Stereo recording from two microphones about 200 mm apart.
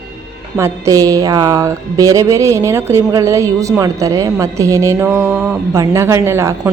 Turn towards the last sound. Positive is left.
turn(degrees=-15)  # may be behind; listen again after turning